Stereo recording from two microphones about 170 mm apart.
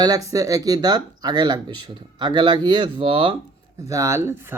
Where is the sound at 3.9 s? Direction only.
20° right (ahead or behind).